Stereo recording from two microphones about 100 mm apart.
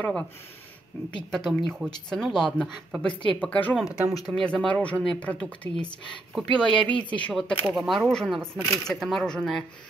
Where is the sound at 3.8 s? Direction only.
5° right (ahead or behind).